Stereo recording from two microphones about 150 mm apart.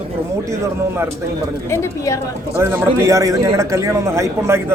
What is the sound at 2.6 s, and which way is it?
A man's voice, 15° right (ahead or behind).